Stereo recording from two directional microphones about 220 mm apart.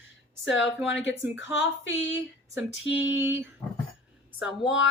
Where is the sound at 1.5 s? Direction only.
60° left (ahead or behind).